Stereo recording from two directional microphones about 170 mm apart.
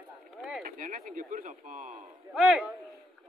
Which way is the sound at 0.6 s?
50° right (ahead or behind).